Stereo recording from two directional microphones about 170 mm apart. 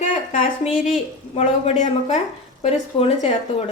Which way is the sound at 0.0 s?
50° left (ahead or behind).